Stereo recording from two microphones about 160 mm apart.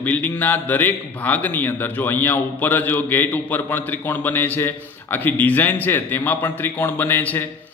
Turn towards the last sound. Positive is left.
turn(degrees=10)  # may be behind; listen again after turning